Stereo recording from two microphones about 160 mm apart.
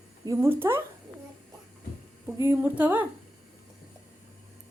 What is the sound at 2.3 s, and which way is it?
Speech, 15° right (ahead or behind).